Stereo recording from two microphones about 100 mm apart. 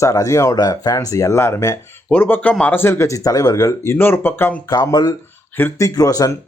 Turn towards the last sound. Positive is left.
turn(degrees=35)  # may be behind; listen again after turning